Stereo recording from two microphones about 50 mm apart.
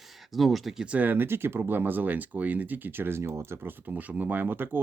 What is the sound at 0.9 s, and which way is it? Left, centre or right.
Speech, right.